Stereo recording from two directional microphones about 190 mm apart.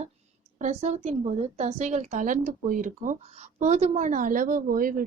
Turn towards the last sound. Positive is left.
turn(degrees=-45)  # may be behind; listen again after turning